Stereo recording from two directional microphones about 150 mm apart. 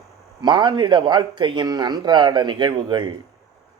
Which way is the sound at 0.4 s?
30° right (ahead or behind).